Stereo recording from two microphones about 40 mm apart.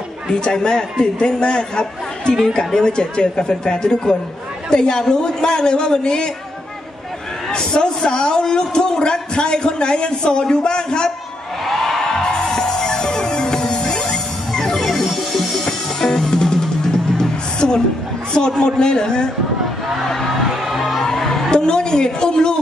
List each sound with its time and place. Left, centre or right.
0.3 s a man's voice: centre
7.5 s a man's voice: centre
11.6 s a sound: centre
12.0 s music: centre
18.3 s a man's voice: centre
20.6 s music: centre
21.0 s music: centre
21.5 s speech: left